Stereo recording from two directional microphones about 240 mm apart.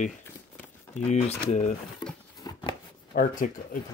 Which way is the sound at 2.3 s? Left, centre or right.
Centre.